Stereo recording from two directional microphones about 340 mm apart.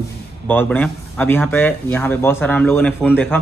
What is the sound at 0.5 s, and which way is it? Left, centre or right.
Speech, centre.